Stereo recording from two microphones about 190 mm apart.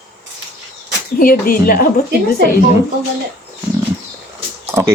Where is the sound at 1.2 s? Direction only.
50° left (ahead or behind).